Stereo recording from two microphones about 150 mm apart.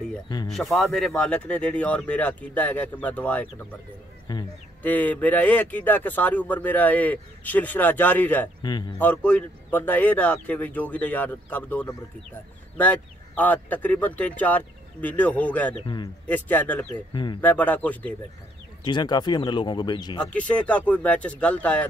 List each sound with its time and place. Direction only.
0.5 s speech: centre (ahead or behind)
4.3 s speech: 25° left (ahead or behind)
4.8 s speech: 10° left (ahead or behind)
8.6 s speech: 30° left (ahead or behind)
8.9 s speech: 10° left (ahead or behind)
15.8 s a man's voice: 30° left (ahead or behind)
16.3 s speech: 10° left (ahead or behind)
17.1 s a man's voice: 30° left (ahead or behind)
17.4 s speech: 10° left (ahead or behind)
18.9 s speech: 30° left (ahead or behind)
20.2 s speech: 10° left (ahead or behind)